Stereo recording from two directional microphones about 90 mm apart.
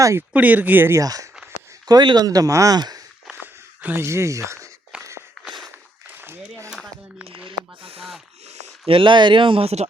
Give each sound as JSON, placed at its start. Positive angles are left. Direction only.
{"t": 0.0, "sound": "speech", "side_deg": -35}
{"t": 0.3, "sound": "speech", "side_deg": -20}
{"t": 1.0, "sound": "speech", "side_deg": -40}
{"t": 1.9, "sound": "speech", "side_deg": -55}
{"t": 2.7, "sound": "speech", "side_deg": -50}
{"t": 3.4, "sound": "a sound", "side_deg": -25}
{"t": 6.7, "sound": "a sound", "side_deg": 0}
{"t": 7.4, "sound": "snake", "side_deg": -90}
{"t": 8.9, "sound": "speech", "side_deg": -70}